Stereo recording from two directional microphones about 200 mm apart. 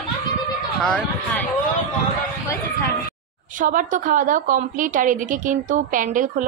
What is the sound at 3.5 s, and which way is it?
A woman's voice, 40° right (ahead or behind).